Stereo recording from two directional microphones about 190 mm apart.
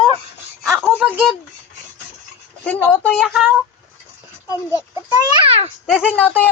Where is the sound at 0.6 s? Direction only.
Centre (ahead or behind).